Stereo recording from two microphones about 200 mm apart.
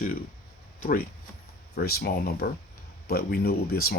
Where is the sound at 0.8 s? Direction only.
45° left (ahead or behind).